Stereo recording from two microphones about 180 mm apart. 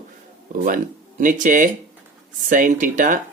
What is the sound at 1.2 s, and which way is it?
Speech, 45° right (ahead or behind).